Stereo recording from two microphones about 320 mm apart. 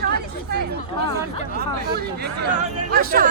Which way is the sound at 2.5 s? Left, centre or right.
Right.